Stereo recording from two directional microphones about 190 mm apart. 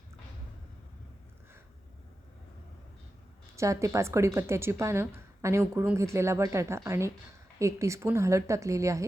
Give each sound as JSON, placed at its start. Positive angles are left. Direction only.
{"t": 3.5, "sound": "speech", "side_deg": -15}